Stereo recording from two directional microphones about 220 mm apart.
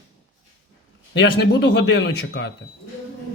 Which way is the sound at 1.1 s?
50° left (ahead or behind).